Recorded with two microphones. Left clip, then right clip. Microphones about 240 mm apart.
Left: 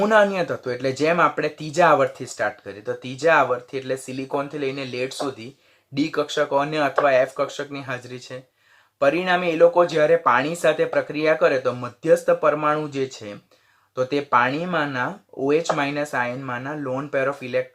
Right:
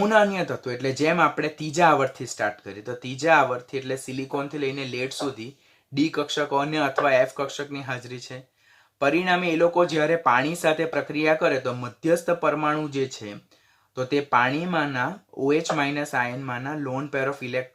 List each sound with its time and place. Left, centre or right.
0.0 s speech: centre